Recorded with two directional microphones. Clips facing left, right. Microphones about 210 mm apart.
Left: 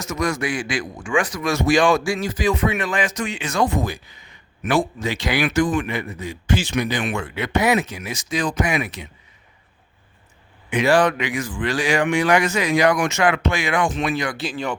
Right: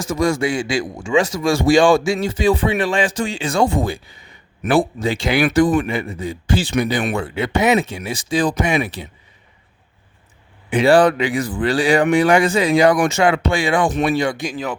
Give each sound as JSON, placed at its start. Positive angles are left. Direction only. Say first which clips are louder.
{"t": 0.0, "sound": "a man's voice", "louder": "right 5 dB", "side_deg": -30}
{"t": 10.7, "sound": "speech", "louder": "right 4 dB", "side_deg": -30}
{"t": 14.3, "sound": "speech", "louder": "right 1 dB", "side_deg": -10}